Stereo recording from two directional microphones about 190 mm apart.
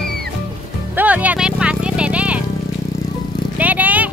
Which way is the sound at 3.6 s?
10° right (ahead or behind).